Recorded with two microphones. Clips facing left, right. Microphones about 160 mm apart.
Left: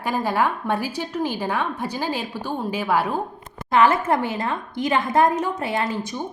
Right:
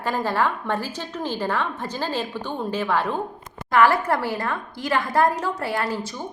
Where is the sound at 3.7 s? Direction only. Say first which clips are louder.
Left 1 dB; 20° left (ahead or behind).